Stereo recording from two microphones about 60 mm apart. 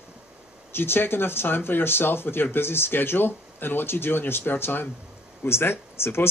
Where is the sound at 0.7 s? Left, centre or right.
Left.